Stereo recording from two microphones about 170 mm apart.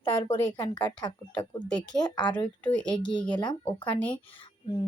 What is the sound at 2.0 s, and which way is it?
Speech, 25° left (ahead or behind).